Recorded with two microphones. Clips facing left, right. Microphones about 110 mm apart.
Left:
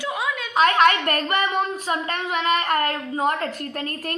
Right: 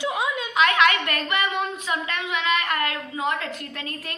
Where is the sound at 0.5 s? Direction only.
40° left (ahead or behind).